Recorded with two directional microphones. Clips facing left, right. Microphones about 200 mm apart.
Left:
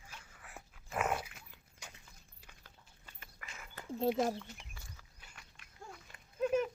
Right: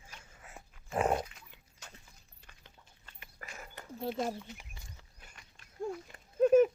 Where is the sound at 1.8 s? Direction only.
10° left (ahead or behind).